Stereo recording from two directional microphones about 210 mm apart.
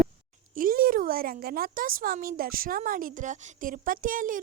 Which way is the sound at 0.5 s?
40° right (ahead or behind).